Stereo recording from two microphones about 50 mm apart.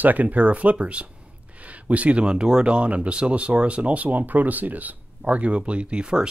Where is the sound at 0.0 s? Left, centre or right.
Right.